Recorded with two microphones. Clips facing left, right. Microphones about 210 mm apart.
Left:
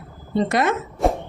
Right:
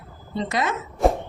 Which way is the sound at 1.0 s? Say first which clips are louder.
Right 1 dB; centre (ahead or behind).